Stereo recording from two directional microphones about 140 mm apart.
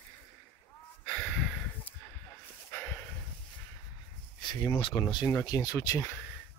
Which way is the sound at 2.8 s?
10° left (ahead or behind).